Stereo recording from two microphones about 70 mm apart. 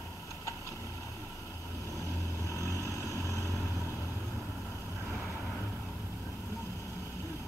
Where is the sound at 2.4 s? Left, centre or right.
Left.